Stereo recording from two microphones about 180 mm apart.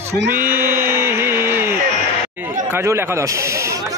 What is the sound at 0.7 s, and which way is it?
Music, 15° right (ahead or behind).